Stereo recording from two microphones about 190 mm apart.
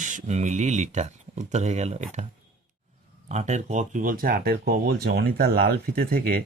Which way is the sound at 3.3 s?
40° right (ahead or behind).